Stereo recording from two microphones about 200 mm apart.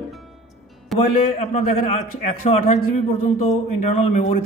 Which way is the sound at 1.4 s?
30° left (ahead or behind).